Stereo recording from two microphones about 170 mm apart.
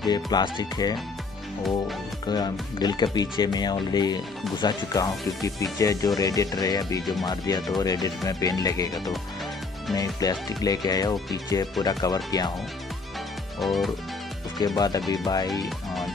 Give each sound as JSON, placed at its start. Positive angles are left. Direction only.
{"t": 0.0, "sound": "speech", "side_deg": 25}
{"t": 2.2, "sound": "speech", "side_deg": 25}
{"t": 13.6, "sound": "music", "side_deg": 0}
{"t": 14.8, "sound": "speech", "side_deg": 20}